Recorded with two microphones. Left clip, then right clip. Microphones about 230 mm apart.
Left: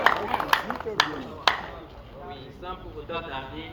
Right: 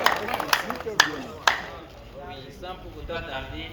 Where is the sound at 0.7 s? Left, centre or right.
Right.